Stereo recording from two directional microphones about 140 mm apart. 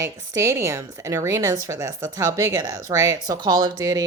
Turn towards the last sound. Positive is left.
turn(degrees=-25)  # may be behind; listen again after turning